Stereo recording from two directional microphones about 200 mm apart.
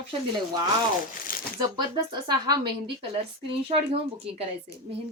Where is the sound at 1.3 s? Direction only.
45° left (ahead or behind).